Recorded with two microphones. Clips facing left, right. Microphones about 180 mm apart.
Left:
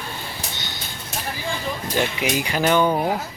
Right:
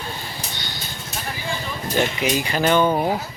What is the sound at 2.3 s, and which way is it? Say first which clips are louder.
Speech: even; 10° left (ahead or behind).